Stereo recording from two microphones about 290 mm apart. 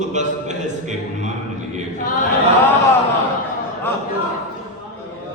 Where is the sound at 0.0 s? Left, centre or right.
Right.